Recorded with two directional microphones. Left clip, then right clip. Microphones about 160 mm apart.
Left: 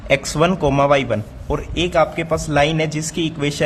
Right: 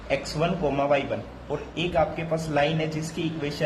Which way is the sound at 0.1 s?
50° left (ahead or behind).